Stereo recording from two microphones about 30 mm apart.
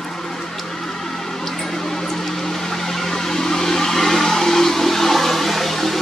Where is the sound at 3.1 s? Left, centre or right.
Centre.